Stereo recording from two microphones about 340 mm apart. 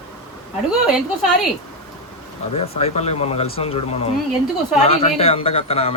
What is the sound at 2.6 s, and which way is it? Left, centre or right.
Speech, centre.